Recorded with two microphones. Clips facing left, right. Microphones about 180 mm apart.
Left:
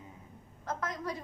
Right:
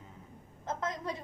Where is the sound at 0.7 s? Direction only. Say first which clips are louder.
Right 1 dB; 25° right (ahead or behind).